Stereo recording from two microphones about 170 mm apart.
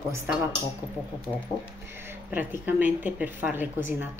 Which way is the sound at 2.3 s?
10° right (ahead or behind).